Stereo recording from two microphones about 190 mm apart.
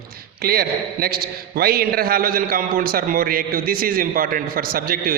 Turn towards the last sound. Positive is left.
turn(degrees=-50)  # may be behind; listen again after turning